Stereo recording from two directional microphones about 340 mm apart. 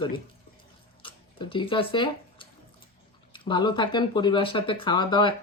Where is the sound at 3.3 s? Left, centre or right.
Centre.